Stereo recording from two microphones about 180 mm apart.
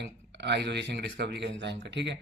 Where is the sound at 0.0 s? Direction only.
70° right (ahead or behind).